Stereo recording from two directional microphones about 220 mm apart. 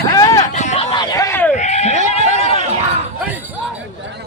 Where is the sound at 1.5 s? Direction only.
30° left (ahead or behind).